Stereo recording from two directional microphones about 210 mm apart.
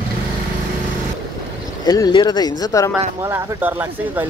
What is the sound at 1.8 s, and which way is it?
Speech, 20° left (ahead or behind).